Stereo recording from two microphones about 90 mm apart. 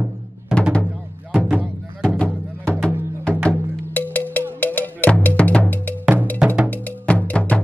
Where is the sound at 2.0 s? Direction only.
10° left (ahead or behind).